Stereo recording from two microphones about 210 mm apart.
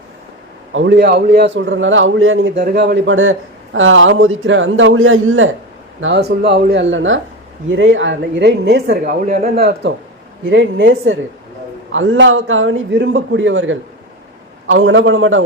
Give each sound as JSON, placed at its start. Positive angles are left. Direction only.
{"t": 0.7, "sound": "a man's voice", "side_deg": -60}
{"t": 6.0, "sound": "a man's voice", "side_deg": -55}
{"t": 10.5, "sound": "a man's voice", "side_deg": -65}